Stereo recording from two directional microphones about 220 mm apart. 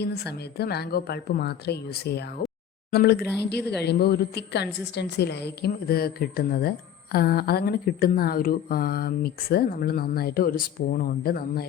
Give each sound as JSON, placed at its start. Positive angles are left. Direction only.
{"t": 0.0, "sound": "a woman's voice", "side_deg": 50}